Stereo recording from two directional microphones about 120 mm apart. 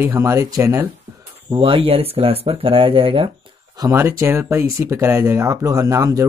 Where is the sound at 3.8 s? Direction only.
25° right (ahead or behind).